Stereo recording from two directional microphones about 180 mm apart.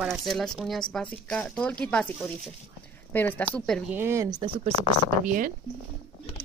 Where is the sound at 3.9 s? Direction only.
15° right (ahead or behind); by 4.7 s 30° right (ahead or behind).